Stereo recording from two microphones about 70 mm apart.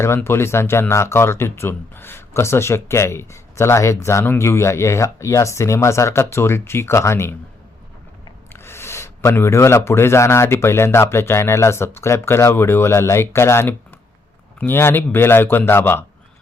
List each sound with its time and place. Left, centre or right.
0.3 s a man's voice: left
8.5 s a man's voice: left